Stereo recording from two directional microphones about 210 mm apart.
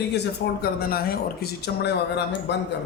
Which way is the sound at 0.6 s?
45° left (ahead or behind).